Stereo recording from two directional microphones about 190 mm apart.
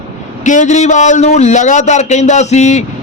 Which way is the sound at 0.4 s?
40° left (ahead or behind).